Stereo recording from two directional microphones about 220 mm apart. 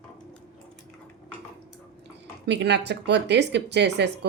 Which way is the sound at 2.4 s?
50° right (ahead or behind).